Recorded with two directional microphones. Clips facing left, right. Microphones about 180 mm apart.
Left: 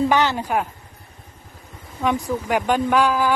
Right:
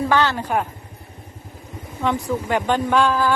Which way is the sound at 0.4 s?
Centre (ahead or behind).